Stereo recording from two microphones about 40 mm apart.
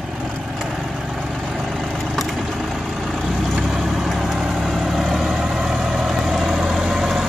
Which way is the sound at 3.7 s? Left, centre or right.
Centre.